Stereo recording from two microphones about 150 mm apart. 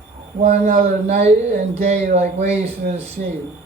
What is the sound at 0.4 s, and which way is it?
Speech, 50° right (ahead or behind).